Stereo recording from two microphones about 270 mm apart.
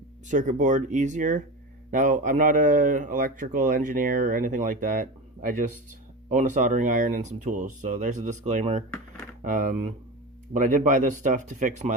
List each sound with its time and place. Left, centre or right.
0.3 s speech: right